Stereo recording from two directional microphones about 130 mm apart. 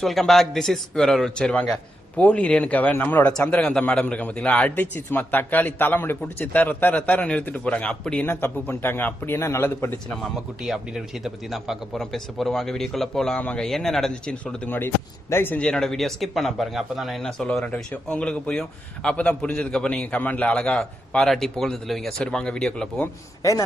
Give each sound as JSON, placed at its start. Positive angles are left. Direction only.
{"t": 0.0, "sound": "a man's voice", "side_deg": 0}
{"t": 10.2, "sound": "a man's voice", "side_deg": 0}
{"t": 23.4, "sound": "a man's voice", "side_deg": 25}